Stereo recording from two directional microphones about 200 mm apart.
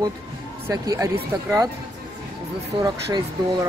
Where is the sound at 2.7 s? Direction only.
25° right (ahead or behind).